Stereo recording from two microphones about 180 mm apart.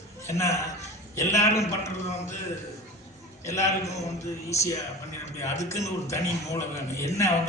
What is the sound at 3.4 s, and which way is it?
Speech, 15° left (ahead or behind).